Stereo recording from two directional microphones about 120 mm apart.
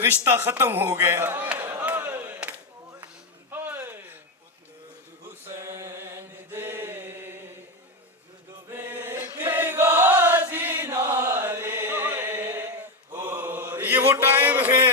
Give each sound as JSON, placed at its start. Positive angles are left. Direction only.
{"t": 0.0, "sound": "a sound", "side_deg": -20}
{"t": 5.3, "sound": "chant", "side_deg": -20}
{"t": 8.6, "sound": "chant", "side_deg": -20}